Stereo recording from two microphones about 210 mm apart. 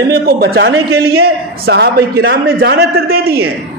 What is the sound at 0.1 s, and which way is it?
A man's voice, 50° right (ahead or behind).